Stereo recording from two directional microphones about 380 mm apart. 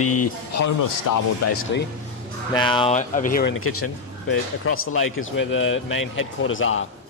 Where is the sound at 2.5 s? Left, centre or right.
Centre.